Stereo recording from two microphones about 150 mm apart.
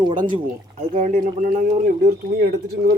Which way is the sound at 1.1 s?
65° right (ahead or behind).